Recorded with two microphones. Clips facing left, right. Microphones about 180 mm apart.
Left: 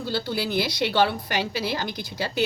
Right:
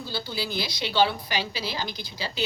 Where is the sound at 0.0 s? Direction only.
70° left (ahead or behind).